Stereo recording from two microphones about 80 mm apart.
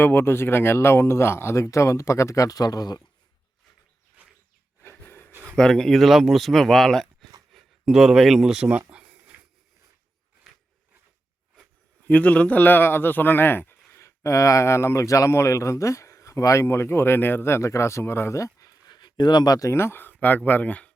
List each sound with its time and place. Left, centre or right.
0.0 s speech: left
4.8 s snort: left
5.5 s speech: centre
8.9 s a sound: centre
12.0 s a man's voice: centre; by 18.9 s left
18.9 s speech: left
19.7 s a man's voice: left